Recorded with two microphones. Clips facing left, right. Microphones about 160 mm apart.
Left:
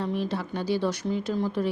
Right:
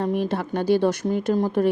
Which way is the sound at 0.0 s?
55° right (ahead or behind).